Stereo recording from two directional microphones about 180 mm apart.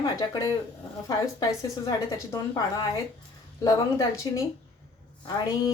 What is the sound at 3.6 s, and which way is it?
Speech, 20° left (ahead or behind).